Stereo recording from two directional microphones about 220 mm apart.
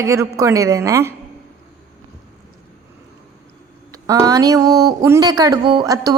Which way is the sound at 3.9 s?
15° right (ahead or behind).